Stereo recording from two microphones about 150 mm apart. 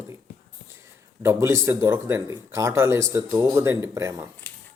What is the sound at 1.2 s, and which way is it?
Speech, 15° right (ahead or behind).